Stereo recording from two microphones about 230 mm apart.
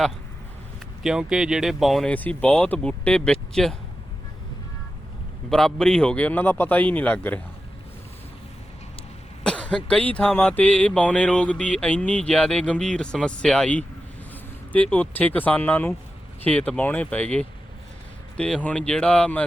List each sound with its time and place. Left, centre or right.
1.0 s speech: centre
5.5 s speech: centre
9.4 s speech: centre